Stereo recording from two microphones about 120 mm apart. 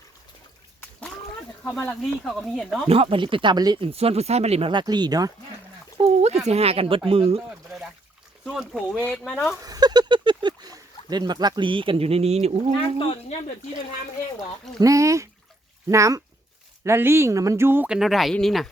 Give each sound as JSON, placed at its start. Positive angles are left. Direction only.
{"t": 1.7, "sound": "speech", "side_deg": 15}
{"t": 2.0, "sound": "speech", "side_deg": 0}
{"t": 2.9, "sound": "speech", "side_deg": -50}
{"t": 3.8, "sound": "speech", "side_deg": -50}
{"t": 6.0, "sound": "a sound", "side_deg": -65}
{"t": 6.5, "sound": "speech", "side_deg": -55}
{"t": 8.4, "sound": "speech", "side_deg": 0}
{"t": 9.6, "sound": "speech", "side_deg": -30}
{"t": 13.0, "sound": "speech", "side_deg": 45}
{"t": 14.8, "sound": "speech", "side_deg": -25}
{"t": 17.8, "sound": "speech", "side_deg": -5}